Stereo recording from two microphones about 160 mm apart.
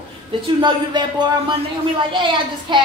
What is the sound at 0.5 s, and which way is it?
Speech, 25° right (ahead or behind).